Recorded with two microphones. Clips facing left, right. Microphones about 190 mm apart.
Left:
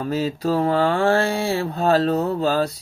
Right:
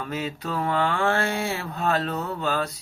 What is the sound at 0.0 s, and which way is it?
Mantra, 35° left (ahead or behind).